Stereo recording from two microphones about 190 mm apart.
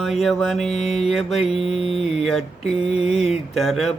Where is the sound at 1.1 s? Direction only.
Centre (ahead or behind).